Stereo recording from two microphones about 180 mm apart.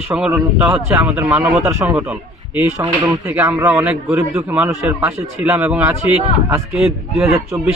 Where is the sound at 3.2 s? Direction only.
15° right (ahead or behind).